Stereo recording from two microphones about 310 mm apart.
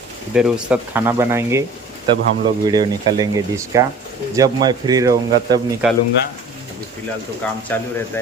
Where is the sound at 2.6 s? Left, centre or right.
Centre.